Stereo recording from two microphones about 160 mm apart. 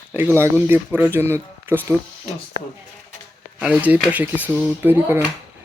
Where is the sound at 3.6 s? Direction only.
10° right (ahead or behind).